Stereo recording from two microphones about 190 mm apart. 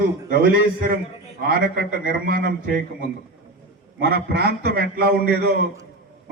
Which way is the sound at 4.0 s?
55° right (ahead or behind).